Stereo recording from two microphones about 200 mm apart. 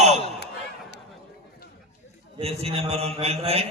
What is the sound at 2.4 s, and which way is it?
A man's voice, 30° right (ahead or behind).